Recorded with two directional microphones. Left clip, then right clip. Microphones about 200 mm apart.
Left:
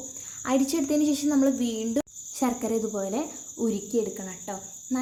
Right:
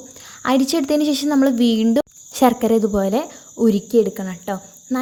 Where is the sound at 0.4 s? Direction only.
45° right (ahead or behind).